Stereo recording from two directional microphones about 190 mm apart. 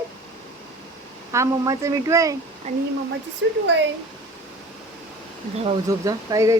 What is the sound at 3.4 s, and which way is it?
Speech, 75° right (ahead or behind).